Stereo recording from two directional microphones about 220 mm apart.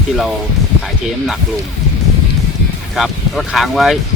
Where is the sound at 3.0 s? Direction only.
Centre (ahead or behind).